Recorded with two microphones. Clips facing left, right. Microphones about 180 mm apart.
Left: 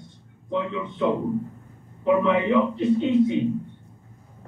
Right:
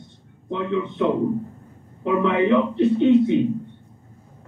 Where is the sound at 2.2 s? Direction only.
70° right (ahead or behind).